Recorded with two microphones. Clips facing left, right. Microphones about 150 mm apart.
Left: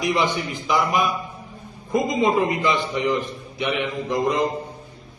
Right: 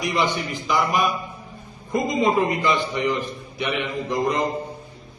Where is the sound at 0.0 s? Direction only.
15° left (ahead or behind).